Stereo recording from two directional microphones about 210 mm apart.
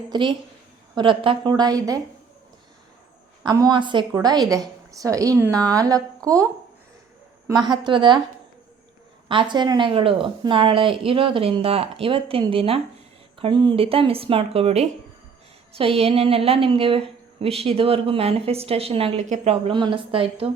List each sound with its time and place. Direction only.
0.1 s speech: 20° right (ahead or behind)
3.4 s speech: 20° right (ahead or behind)
7.4 s speech: 20° right (ahead or behind)
9.3 s speech: 20° right (ahead or behind)